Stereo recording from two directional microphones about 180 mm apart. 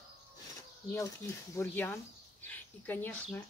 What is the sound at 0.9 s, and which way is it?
Speech, 15° left (ahead or behind).